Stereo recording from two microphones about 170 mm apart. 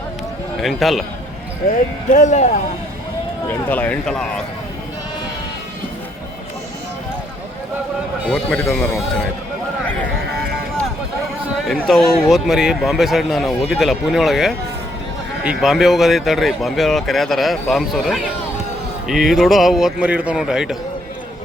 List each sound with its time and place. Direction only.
0.6 s speech: centre (ahead or behind)
2.0 s speech: 45° left (ahead or behind)
3.5 s speech: 10° left (ahead or behind)
8.3 s speech: 5° left (ahead or behind)
11.7 s speech: centre (ahead or behind)